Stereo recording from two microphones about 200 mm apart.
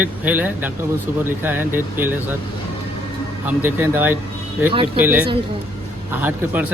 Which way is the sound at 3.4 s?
10° right (ahead or behind).